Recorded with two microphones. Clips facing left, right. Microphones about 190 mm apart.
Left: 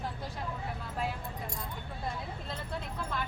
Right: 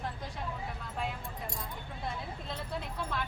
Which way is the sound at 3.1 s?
Centre (ahead or behind).